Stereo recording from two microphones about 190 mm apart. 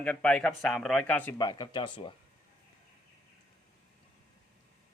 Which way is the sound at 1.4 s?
20° left (ahead or behind).